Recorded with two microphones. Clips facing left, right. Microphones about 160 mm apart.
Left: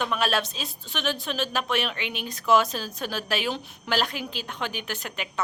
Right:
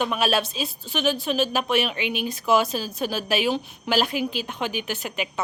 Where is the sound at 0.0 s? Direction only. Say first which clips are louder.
Right 3 dB; 10° right (ahead or behind).